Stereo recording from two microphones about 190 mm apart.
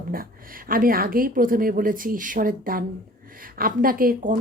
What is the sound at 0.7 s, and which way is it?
A woman's voice, 50° right (ahead or behind).